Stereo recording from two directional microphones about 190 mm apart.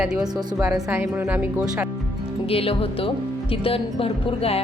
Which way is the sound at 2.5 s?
30° left (ahead or behind).